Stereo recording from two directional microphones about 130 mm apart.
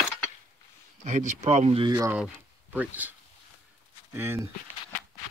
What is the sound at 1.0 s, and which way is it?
Speech, 70° right (ahead or behind).